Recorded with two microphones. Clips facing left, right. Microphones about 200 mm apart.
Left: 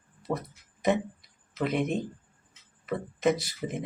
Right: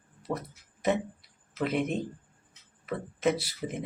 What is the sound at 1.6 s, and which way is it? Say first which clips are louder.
Speech: left 1 dB; 5° right (ahead or behind).